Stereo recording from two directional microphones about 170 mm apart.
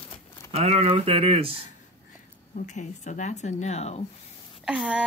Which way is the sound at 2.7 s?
45° left (ahead or behind).